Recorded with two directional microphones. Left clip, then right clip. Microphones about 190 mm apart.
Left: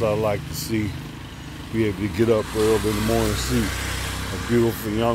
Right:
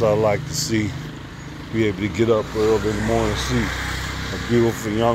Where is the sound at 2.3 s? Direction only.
25° left (ahead or behind).